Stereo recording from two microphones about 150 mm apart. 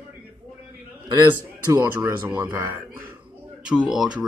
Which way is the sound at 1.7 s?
15° right (ahead or behind).